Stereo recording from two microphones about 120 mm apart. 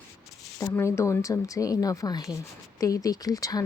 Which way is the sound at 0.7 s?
20° left (ahead or behind).